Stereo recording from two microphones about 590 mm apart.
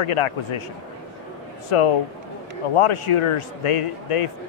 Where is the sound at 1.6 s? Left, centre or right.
Left.